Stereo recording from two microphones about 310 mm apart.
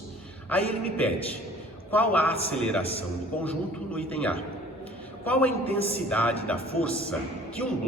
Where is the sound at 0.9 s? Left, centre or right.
Centre.